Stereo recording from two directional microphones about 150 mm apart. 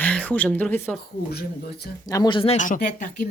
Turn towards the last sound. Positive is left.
turn(degrees=65)  # may be behind; listen again after turning